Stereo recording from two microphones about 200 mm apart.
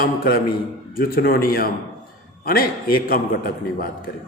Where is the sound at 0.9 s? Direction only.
45° left (ahead or behind).